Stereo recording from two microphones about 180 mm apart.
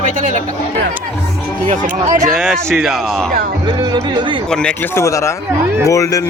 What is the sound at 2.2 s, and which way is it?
Speech, centre (ahead or behind).